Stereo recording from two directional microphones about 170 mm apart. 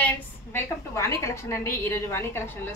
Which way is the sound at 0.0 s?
15° left (ahead or behind).